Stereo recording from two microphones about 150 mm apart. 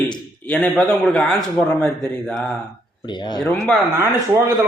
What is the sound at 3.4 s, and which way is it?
Speech, 5° left (ahead or behind).